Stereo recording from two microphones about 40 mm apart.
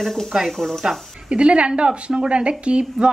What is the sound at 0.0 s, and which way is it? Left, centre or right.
Speech, centre.